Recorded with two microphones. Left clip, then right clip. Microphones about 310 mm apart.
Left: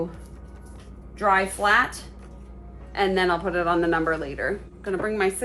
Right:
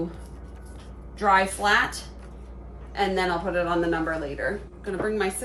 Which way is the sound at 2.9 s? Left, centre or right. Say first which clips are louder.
Left 2 dB; centre.